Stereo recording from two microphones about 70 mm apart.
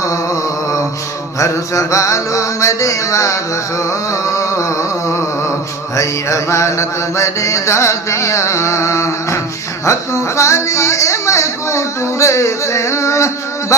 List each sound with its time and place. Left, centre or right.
1.4 s mantra: left
3.8 s a sound: left
6.0 s mantra: left
9.8 s speech: left